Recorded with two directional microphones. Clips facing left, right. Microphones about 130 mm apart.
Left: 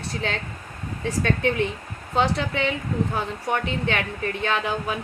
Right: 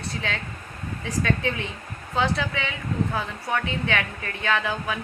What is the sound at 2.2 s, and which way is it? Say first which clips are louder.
A woman's voice: left 3 dB; 30° left (ahead or behind).